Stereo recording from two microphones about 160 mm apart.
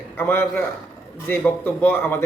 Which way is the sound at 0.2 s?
15° left (ahead or behind).